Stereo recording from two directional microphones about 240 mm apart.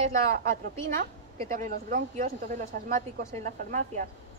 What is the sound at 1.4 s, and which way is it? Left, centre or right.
Speech, right.